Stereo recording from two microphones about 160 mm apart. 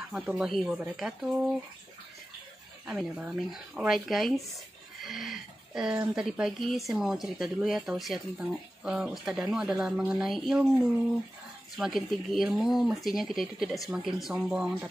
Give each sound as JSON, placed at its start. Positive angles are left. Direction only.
{"t": 0.1, "sound": "speech", "side_deg": -5}
{"t": 2.9, "sound": "speech", "side_deg": -5}
{"t": 5.0, "sound": "a sound", "side_deg": 0}
{"t": 5.8, "sound": "speech", "side_deg": -5}